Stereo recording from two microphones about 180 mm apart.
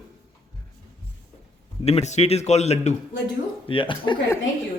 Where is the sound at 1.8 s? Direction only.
35° left (ahead or behind).